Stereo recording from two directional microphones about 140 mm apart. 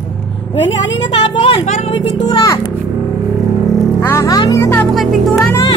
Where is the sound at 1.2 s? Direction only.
40° left (ahead or behind).